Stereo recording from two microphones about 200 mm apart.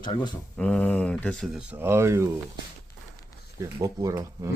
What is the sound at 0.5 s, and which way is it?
Speech, 5° left (ahead or behind).